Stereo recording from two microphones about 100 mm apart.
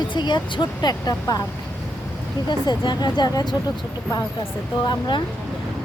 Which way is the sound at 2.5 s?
50° left (ahead or behind).